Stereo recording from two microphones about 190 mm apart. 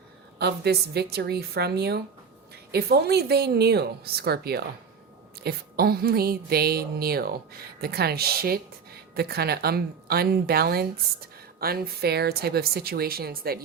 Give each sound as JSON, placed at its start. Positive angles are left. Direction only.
{"t": 0.3, "sound": "a woman's voice", "side_deg": -60}